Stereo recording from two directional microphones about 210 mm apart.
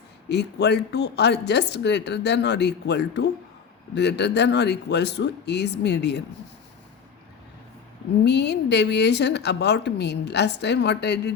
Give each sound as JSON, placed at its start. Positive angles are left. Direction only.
{"t": 0.3, "sound": "speech", "side_deg": 55}
{"t": 8.2, "sound": "speech", "side_deg": 55}